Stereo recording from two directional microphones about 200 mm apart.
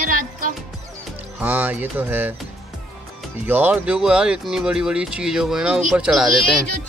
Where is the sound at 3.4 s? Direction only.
10° right (ahead or behind).